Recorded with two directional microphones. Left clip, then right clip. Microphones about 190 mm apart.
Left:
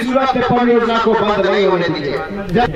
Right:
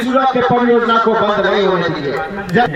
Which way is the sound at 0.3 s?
30° left (ahead or behind).